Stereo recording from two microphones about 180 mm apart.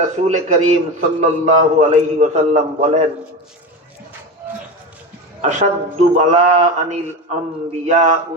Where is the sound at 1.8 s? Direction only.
40° right (ahead or behind).